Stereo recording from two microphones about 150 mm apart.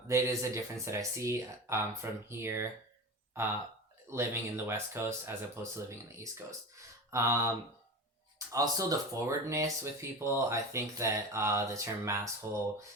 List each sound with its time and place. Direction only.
0.1 s speech: 20° right (ahead or behind)
4.1 s speech: 15° right (ahead or behind)
8.5 s speech: 25° right (ahead or behind)